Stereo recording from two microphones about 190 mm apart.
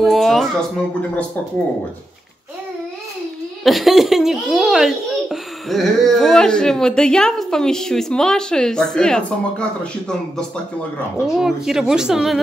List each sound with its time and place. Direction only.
0.0 s a child's voice: centre (ahead or behind)
3.6 s a child's voice: centre (ahead or behind)